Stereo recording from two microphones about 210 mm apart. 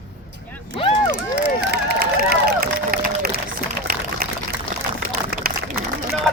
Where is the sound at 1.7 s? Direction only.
50° right (ahead or behind).